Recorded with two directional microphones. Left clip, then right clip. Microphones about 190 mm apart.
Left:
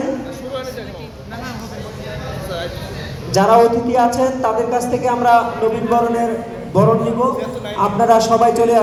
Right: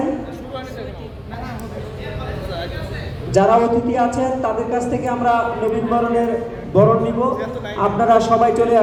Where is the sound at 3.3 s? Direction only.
25° left (ahead or behind).